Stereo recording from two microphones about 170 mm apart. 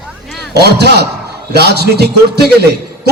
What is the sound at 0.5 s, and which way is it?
A man's voice, 75° right (ahead or behind).